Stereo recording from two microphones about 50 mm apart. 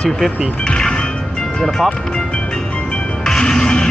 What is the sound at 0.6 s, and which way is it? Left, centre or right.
Music, centre.